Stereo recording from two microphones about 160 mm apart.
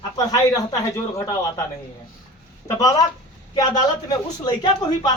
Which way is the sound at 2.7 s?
20° left (ahead or behind).